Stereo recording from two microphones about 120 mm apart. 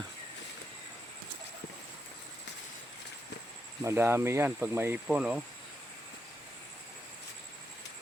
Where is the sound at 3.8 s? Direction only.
20° right (ahead or behind).